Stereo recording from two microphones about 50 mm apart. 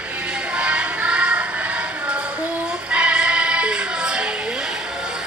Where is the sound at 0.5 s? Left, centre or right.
Right.